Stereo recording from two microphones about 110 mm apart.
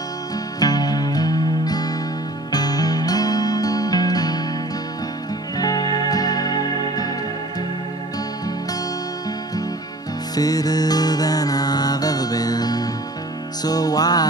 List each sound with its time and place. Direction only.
0.6 s music: 35° left (ahead or behind)
5.6 s music: 35° left (ahead or behind)
10.3 s music: 35° left (ahead or behind)